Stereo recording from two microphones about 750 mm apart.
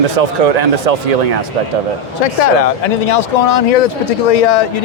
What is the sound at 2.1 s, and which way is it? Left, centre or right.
Speech, left.